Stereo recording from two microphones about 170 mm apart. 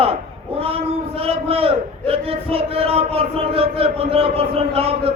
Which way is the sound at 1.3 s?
35° right (ahead or behind).